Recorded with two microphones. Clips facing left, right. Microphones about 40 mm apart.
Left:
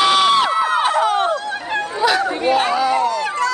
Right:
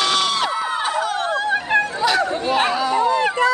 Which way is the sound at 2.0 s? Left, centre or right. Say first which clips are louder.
Left 2 dB; centre.